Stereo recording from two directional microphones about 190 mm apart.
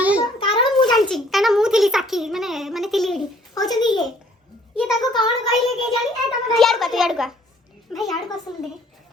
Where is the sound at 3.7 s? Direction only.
20° left (ahead or behind).